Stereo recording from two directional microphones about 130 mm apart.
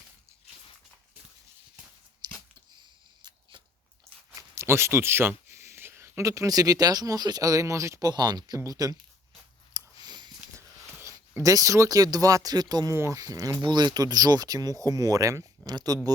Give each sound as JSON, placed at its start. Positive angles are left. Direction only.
{"t": 2.2, "sound": "dog", "side_deg": -30}
{"t": 2.7, "sound": "camera", "side_deg": -35}
{"t": 4.4, "sound": "speech", "side_deg": -20}
{"t": 9.7, "sound": "a sound", "side_deg": -30}
{"t": 11.0, "sound": "speech", "side_deg": -25}